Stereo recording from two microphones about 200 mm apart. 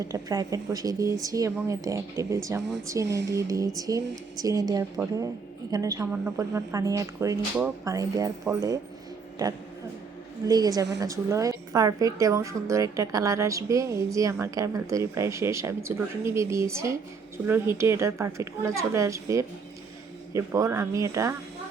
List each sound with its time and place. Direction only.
0.0 s a woman's voice: 15° right (ahead or behind)
10.4 s a woman's voice: 20° right (ahead or behind)